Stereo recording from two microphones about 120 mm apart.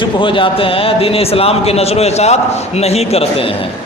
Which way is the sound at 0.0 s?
45° left (ahead or behind).